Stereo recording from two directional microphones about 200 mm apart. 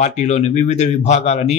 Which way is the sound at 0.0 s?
35° left (ahead or behind).